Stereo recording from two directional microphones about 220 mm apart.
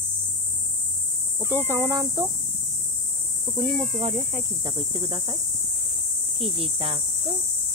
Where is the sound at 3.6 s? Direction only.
Centre (ahead or behind).